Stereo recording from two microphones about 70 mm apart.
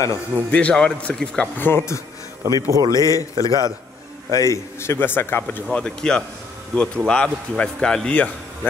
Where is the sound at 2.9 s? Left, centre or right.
Left.